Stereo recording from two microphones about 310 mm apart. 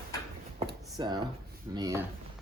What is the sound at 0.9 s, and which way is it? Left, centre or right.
Speech, centre.